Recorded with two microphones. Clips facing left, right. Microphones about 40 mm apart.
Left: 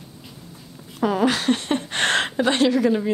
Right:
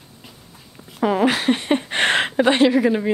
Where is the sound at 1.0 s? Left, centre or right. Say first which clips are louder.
Right 2 dB; centre.